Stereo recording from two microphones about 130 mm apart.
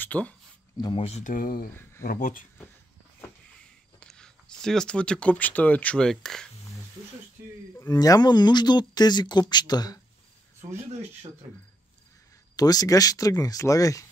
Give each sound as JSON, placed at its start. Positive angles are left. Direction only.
{"t": 0.0, "sound": "speech", "side_deg": 10}
{"t": 0.9, "sound": "speech", "side_deg": 50}
{"t": 1.2, "sound": "speech", "side_deg": 90}
{"t": 4.0, "sound": "speech", "side_deg": 5}
{"t": 7.8, "sound": "speech", "side_deg": 30}
{"t": 12.5, "sound": "speech", "side_deg": 30}